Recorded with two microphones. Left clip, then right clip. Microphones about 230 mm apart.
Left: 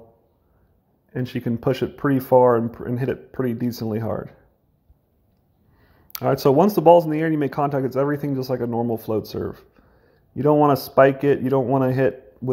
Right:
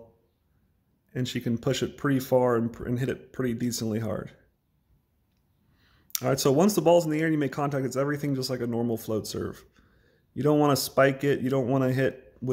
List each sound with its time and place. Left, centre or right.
1.4 s speech: centre
2.0 s speech: centre
6.1 s speech: centre
8.6 s speech: centre
9.8 s a sound: centre
10.7 s speech: centre
11.1 s speech: centre